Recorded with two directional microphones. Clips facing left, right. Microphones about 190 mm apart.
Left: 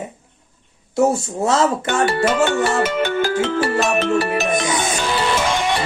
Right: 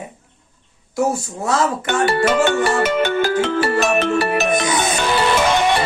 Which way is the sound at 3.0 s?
60° right (ahead or behind).